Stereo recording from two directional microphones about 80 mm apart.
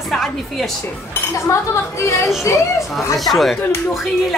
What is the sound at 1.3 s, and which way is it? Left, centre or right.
Speech, left.